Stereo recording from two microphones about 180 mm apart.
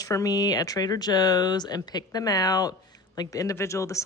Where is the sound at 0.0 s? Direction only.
20° left (ahead or behind).